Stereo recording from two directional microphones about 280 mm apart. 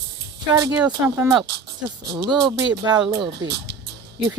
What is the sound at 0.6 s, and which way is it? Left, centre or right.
Speech, centre.